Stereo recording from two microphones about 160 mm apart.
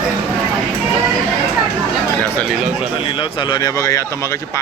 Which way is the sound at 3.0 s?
35° left (ahead or behind).